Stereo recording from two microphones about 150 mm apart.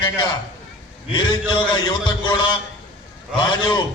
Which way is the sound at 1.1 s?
30° left (ahead or behind).